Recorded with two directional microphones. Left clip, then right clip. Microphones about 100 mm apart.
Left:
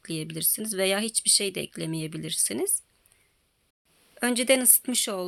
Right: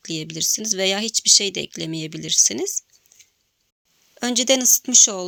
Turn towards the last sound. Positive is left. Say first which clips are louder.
# right 12 dB
turn(degrees=-30)  # may be behind; listen again after turning